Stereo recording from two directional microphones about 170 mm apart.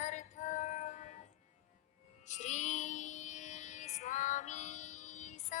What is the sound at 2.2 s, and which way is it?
Music, 45° left (ahead or behind).